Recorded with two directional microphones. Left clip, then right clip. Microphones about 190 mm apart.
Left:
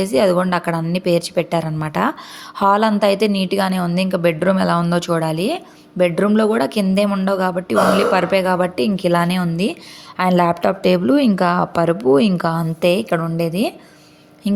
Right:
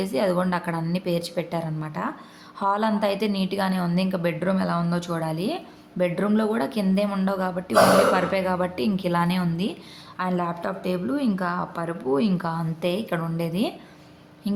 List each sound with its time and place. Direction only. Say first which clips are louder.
0.0 s a woman's voice: left 8 dB; 35° left (ahead or behind)
10.2 s a woman's voice: left 11 dB; 45° left (ahead or behind)